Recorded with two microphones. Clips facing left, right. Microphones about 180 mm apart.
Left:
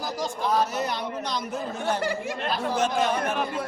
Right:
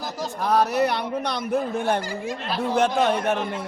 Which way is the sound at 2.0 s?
65° left (ahead or behind).